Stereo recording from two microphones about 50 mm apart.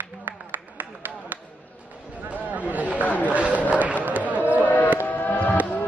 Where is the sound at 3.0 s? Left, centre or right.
Left.